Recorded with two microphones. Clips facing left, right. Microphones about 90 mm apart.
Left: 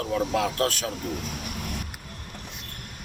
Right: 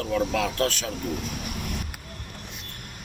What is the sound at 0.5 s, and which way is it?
Speech, 45° left (ahead or behind).